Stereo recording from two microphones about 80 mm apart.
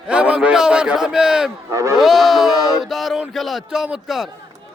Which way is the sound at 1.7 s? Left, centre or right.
Right.